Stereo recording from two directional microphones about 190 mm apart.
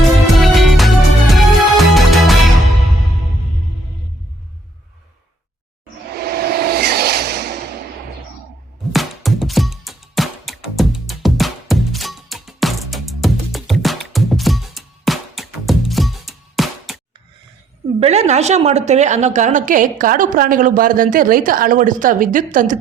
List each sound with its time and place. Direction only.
0.3 s music: centre (ahead or behind)
6.1 s a sound: 55° right (ahead or behind)
8.9 s music: centre (ahead or behind)
18.0 s a woman's voice: 35° right (ahead or behind)